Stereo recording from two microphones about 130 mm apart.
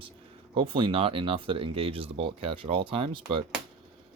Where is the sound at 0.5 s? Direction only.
45° right (ahead or behind).